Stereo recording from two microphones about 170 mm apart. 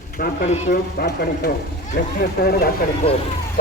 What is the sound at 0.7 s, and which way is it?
A man's voice, 65° left (ahead or behind).